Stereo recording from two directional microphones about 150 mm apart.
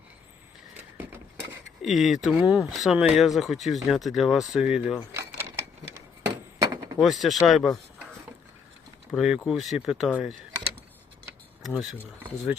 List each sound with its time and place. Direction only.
0.8 s vehicle: 15° right (ahead or behind)
1.8 s speech: centre (ahead or behind)
5.5 s a sound: 20° right (ahead or behind)
7.0 s speech: centre (ahead or behind)
9.1 s speech: 5° right (ahead or behind)
11.6 s speech: centre (ahead or behind)